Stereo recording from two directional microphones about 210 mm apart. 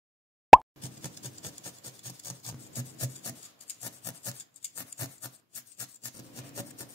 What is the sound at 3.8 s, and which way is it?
Filing, 15° left (ahead or behind).